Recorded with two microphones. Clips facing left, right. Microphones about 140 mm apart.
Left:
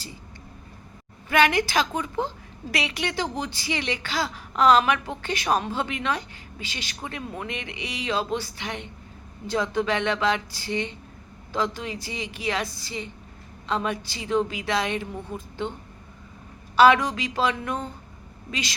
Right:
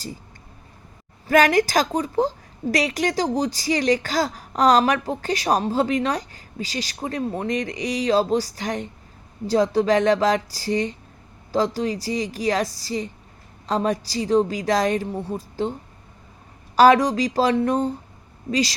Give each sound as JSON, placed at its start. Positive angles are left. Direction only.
{"t": 1.3, "sound": "speech", "side_deg": -40}
{"t": 16.7, "sound": "speech", "side_deg": -40}